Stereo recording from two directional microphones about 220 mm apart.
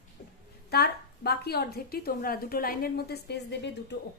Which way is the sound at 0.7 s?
45° left (ahead or behind).